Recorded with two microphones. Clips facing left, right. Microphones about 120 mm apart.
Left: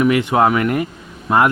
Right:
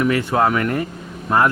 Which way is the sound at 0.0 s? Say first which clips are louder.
Left 3 dB; 15° left (ahead or behind).